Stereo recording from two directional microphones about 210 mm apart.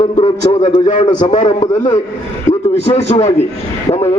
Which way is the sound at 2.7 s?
30° left (ahead or behind).